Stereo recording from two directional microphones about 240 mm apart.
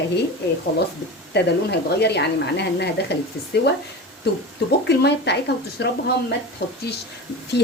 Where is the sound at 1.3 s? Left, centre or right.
Left.